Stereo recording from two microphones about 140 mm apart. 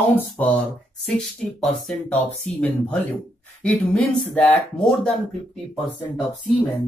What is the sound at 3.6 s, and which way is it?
Speech, 10° left (ahead or behind).